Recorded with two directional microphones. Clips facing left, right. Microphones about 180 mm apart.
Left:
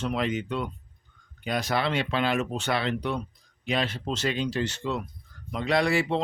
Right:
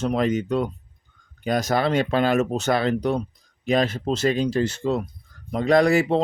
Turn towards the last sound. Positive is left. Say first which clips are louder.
# right 7 dB
turn(degrees=-40)  # may be behind; listen again after turning